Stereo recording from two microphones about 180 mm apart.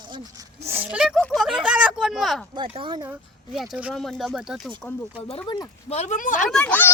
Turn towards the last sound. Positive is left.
turn(degrees=5)  # may be behind; listen again after turning